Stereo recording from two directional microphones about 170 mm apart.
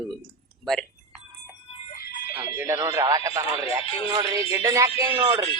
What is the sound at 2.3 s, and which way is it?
Speech, 15° right (ahead or behind).